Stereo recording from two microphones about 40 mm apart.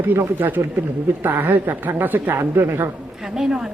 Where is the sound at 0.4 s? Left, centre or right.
Right.